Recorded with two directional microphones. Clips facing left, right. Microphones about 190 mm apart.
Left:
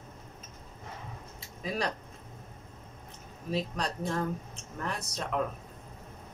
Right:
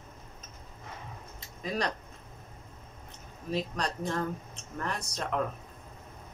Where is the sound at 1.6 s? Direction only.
5° left (ahead or behind).